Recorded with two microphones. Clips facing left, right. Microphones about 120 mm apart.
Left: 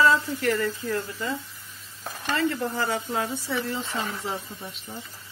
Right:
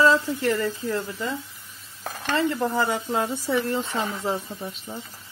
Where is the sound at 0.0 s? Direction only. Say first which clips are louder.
Right 2 dB; 25° right (ahead or behind).